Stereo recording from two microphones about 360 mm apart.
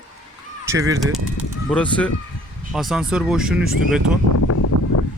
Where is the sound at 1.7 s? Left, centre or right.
Centre.